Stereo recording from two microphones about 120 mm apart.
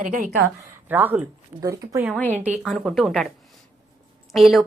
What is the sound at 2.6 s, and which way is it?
Speech, centre (ahead or behind).